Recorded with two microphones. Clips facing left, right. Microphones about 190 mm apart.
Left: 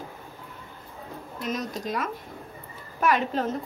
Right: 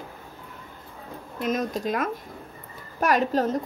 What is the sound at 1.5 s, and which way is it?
Speech, 50° right (ahead or behind).